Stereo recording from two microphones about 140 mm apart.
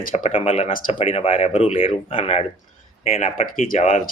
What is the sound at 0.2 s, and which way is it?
Speech, 45° left (ahead or behind).